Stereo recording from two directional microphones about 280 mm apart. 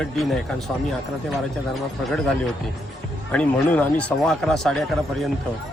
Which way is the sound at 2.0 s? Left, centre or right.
Centre.